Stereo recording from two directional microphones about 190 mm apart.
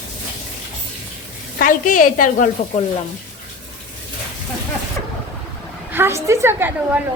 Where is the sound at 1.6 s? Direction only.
45° left (ahead or behind).